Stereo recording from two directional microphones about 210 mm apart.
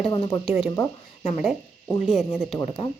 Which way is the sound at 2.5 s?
20° left (ahead or behind).